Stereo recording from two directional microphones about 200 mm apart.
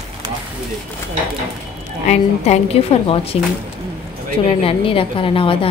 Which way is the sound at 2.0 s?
35° left (ahead or behind).